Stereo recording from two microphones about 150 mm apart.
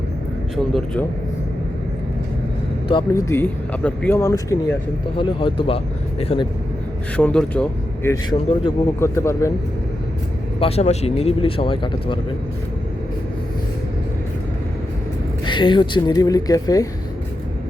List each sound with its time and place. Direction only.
3.1 s speech: 20° left (ahead or behind)
5.1 s speech: 35° left (ahead or behind)
7.2 s speech: 10° left (ahead or behind)
8.0 s speech: 25° left (ahead or behind)
10.6 s speech: 40° left (ahead or behind)
15.4 s speech: 30° left (ahead or behind)